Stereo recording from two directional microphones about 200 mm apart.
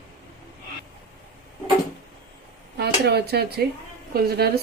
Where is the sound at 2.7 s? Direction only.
50° right (ahead or behind).